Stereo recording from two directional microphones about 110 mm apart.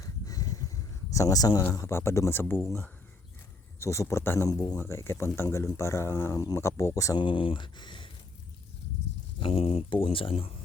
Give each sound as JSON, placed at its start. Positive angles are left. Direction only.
{"t": 0.0, "sound": "a sound", "side_deg": 35}
{"t": 1.7, "sound": "speech", "side_deg": 25}
{"t": 4.4, "sound": "speech", "side_deg": 35}
{"t": 7.2, "sound": "speech", "side_deg": 50}
{"t": 9.4, "sound": "speech", "side_deg": 60}